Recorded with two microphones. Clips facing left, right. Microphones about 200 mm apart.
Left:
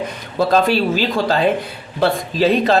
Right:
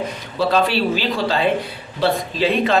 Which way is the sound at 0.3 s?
45° left (ahead or behind).